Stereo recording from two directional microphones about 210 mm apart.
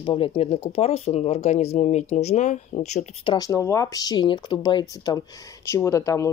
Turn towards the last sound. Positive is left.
turn(degrees=15)  # may be behind; listen again after turning